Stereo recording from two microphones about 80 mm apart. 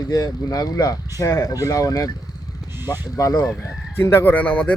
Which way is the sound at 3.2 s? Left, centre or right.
Left.